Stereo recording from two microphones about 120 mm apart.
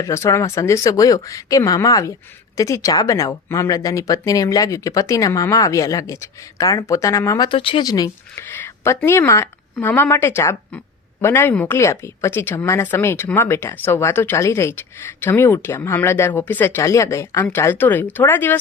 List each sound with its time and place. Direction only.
0.0 s speech: 25° left (ahead or behind)
7.4 s speech: 45° left (ahead or behind)
7.9 s speech: 30° left (ahead or behind)
8.4 s a sound: 20° left (ahead or behind)
9.0 s speech: 20° left (ahead or behind)